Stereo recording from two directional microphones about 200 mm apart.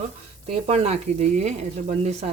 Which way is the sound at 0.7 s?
30° right (ahead or behind).